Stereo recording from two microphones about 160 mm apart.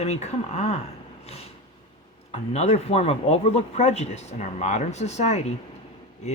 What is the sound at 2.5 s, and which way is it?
Speech, 40° left (ahead or behind).